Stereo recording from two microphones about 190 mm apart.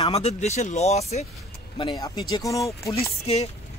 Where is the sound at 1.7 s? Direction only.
20° left (ahead or behind).